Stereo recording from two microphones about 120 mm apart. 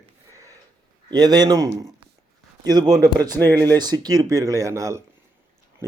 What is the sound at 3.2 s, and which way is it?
Speech, 15° left (ahead or behind).